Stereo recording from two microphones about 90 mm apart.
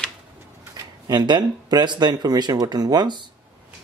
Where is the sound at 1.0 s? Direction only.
55° right (ahead or behind).